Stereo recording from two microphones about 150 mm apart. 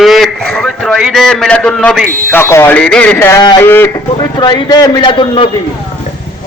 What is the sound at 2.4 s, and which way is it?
Speech, 15° left (ahead or behind).